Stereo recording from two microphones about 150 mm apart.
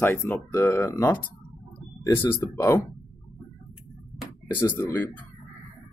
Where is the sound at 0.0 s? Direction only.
15° left (ahead or behind).